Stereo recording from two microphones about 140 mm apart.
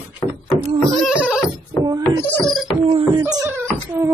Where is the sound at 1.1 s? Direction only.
5° right (ahead or behind).